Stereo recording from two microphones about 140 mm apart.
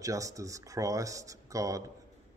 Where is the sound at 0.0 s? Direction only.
25° right (ahead or behind).